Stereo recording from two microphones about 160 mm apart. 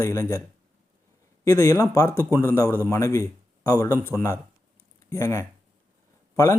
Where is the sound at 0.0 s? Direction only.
20° left (ahead or behind).